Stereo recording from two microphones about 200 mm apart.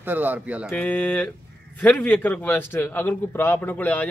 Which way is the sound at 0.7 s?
10° left (ahead or behind).